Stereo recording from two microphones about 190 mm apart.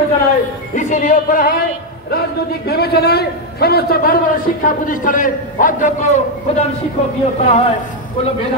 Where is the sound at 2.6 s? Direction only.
55° left (ahead or behind); by 6.6 s 40° left (ahead or behind).